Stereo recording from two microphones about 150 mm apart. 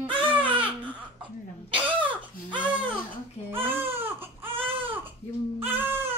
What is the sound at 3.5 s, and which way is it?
Baby cry, 15° right (ahead or behind).